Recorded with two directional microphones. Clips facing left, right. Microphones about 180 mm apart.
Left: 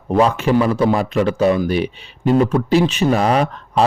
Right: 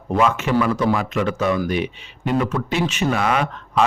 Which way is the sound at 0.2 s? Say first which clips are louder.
Left 4 dB; 35° left (ahead or behind).